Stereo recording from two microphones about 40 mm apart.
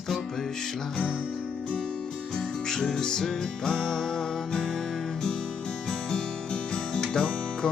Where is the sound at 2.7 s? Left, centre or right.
Centre.